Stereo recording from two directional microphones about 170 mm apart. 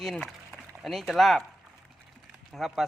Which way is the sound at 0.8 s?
Centre (ahead or behind).